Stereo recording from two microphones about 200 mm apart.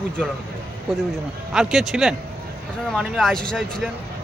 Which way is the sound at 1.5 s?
Centre (ahead or behind).